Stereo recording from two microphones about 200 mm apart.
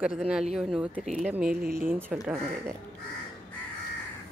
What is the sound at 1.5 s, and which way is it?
Speech, 50° right (ahead or behind).